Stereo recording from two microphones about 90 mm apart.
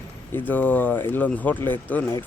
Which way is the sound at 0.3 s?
20° left (ahead or behind).